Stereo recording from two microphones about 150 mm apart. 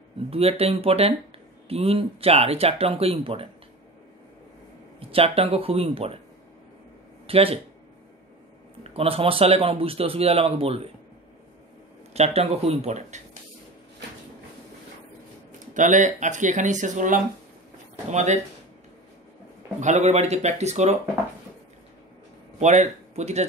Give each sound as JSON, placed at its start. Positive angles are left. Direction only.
{"t": 0.3, "sound": "a man's voice", "side_deg": -40}
{"t": 5.0, "sound": "a man's voice", "side_deg": -40}
{"t": 7.2, "sound": "a man's voice", "side_deg": -40}
{"t": 8.8, "sound": "a man's voice", "side_deg": -40}
{"t": 12.1, "sound": "speech", "side_deg": -45}
{"t": 15.7, "sound": "speech", "side_deg": -55}
{"t": 19.8, "sound": "speech", "side_deg": -50}
{"t": 22.6, "sound": "speech", "side_deg": -50}